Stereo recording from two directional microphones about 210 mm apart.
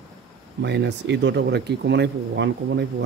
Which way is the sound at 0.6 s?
55° right (ahead or behind).